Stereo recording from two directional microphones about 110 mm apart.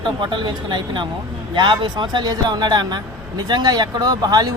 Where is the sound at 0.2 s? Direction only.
45° right (ahead or behind).